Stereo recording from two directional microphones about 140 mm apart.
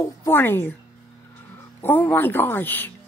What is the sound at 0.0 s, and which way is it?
Speech, 15° left (ahead or behind).